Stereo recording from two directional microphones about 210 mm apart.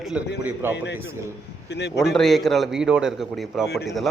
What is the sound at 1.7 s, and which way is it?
Speech, 55° left (ahead or behind).